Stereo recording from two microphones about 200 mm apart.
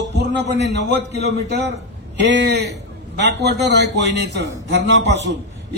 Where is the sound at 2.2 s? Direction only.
60° right (ahead or behind).